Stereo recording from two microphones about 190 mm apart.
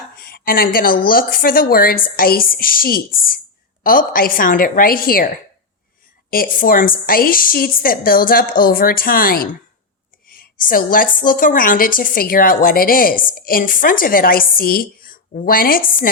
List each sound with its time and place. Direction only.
0.2 s a woman's voice: 55° left (ahead or behind)
6.3 s a woman's voice: 50° left (ahead or behind)